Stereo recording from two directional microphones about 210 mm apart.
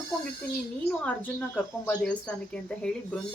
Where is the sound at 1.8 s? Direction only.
5° left (ahead or behind).